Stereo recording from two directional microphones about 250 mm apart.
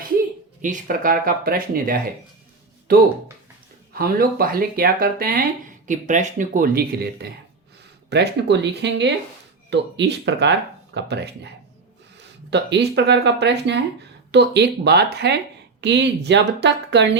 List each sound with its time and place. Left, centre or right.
0.6 s speech: right
12.5 s speech: right